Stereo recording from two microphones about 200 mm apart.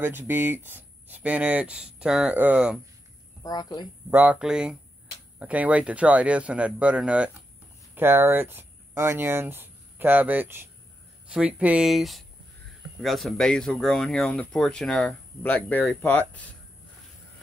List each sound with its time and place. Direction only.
0.0 s speech: 10° right (ahead or behind)
3.4 s speech: 20° left (ahead or behind)
3.8 s speech: 5° right (ahead or behind)